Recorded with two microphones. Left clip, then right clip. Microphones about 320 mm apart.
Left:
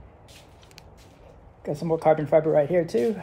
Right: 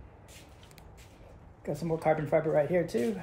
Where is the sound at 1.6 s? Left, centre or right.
Left.